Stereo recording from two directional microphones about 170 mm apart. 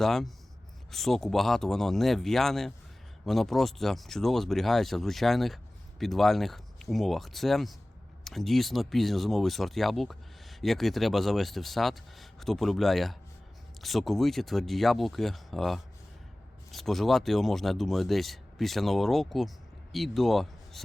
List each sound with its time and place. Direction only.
0.0 s speech: centre (ahead or behind)